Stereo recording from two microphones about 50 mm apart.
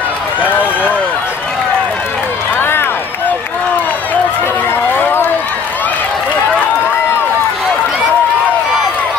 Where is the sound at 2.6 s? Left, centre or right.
Left.